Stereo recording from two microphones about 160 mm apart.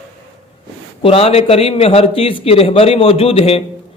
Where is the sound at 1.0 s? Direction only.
35° left (ahead or behind).